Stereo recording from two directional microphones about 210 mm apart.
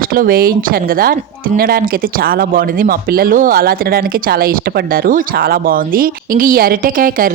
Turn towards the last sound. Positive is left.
turn(degrees=-40)  # may be behind; listen again after turning